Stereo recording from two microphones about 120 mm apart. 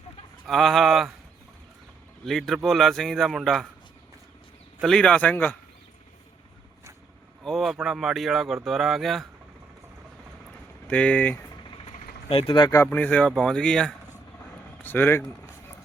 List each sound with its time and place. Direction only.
0.4 s a man's voice: centre (ahead or behind)
2.2 s a man's voice: centre (ahead or behind)
4.8 s speech: 5° left (ahead or behind)
7.4 s a man's voice: centre (ahead or behind)
10.8 s speech: 10° left (ahead or behind)
12.3 s speech: 50° left (ahead or behind)
12.9 s speech: 10° left (ahead or behind)
14.8 s speech: 15° left (ahead or behind)